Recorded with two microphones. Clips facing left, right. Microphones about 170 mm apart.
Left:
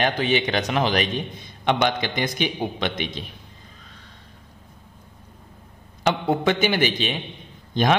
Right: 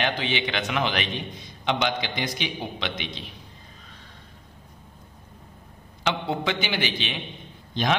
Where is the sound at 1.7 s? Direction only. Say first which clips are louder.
Left 4 dB; 50° left (ahead or behind).